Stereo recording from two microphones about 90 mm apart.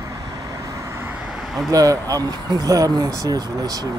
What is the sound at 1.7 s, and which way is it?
Speech, 40° right (ahead or behind).